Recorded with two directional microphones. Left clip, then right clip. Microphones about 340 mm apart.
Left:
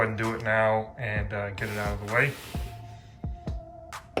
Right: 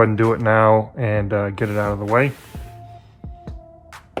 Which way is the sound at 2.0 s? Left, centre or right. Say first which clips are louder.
Right 5 dB; centre.